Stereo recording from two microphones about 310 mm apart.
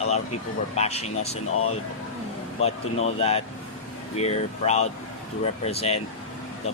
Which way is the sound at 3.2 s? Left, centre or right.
Centre.